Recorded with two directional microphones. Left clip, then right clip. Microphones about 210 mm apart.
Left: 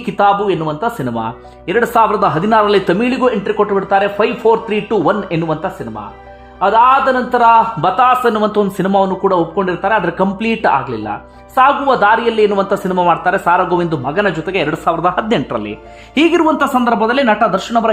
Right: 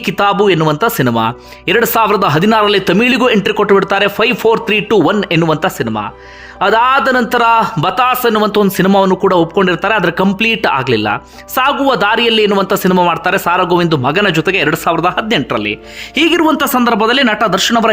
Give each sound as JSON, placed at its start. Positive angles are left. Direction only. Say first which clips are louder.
{"t": 0.0, "sound": "a man's voice", "louder": "right 1 dB", "side_deg": -20}